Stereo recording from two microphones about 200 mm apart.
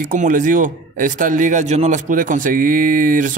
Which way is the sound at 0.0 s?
45° right (ahead or behind).